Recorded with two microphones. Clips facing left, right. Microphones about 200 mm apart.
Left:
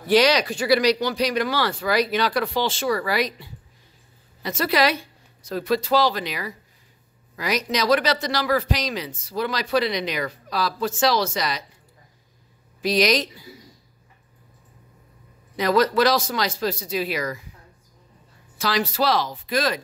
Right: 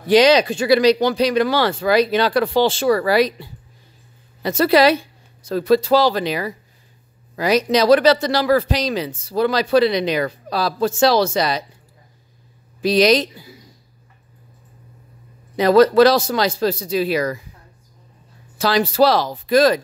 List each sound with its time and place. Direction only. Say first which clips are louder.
0.0 s a woman's voice: right 5 dB; 20° right (ahead or behind)
12.8 s speech: right 6 dB; 30° right (ahead or behind)
15.5 s speech: right 8 dB; 30° right (ahead or behind)
18.6 s speech: right 8 dB; 30° right (ahead or behind)